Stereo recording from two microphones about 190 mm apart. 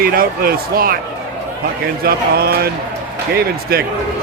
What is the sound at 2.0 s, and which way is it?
A man's voice, 55° right (ahead or behind).